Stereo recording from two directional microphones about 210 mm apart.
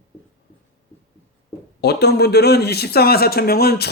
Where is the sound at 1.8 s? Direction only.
50° left (ahead or behind).